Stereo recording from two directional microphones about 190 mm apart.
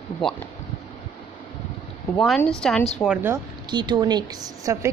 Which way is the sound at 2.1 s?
Centre (ahead or behind).